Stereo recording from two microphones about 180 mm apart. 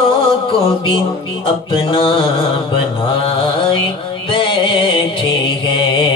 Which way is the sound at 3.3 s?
30° left (ahead or behind).